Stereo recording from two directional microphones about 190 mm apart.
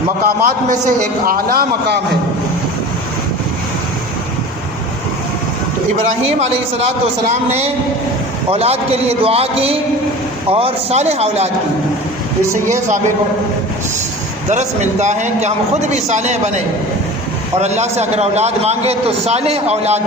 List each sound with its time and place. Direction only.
0.3 s a man's voice: 50° right (ahead or behind)
6.4 s a man's voice: 35° right (ahead or behind)
8.4 s a man's voice: 35° right (ahead or behind)
14.5 s a man's voice: 35° right (ahead or behind)